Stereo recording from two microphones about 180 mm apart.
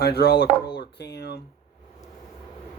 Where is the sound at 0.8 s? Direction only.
70° left (ahead or behind).